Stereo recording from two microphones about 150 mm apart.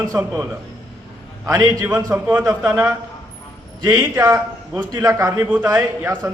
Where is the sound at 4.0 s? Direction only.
20° right (ahead or behind).